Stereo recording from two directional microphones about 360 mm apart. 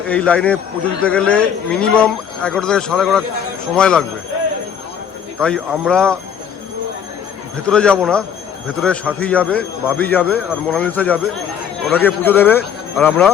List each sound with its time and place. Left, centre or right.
0.1 s a man's voice: centre
5.4 s a man's voice: centre
7.7 s a man's voice: centre